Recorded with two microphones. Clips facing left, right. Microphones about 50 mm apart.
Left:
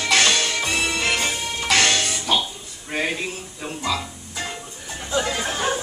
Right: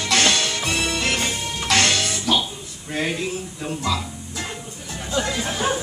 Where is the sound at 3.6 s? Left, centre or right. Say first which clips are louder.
Even; centre.